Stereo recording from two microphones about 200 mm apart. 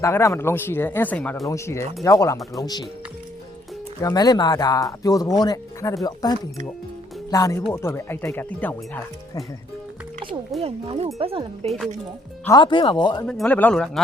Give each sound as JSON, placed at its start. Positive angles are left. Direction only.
{"t": 0.0, "sound": "speech", "side_deg": 15}
{"t": 4.0, "sound": "speech", "side_deg": 20}
{"t": 10.6, "sound": "speech", "side_deg": -30}
{"t": 12.5, "sound": "speech", "side_deg": 25}
{"t": 13.2, "sound": "speech", "side_deg": 5}